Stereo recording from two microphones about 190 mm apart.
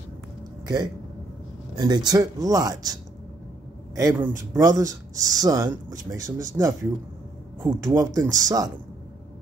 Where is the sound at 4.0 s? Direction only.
15° right (ahead or behind).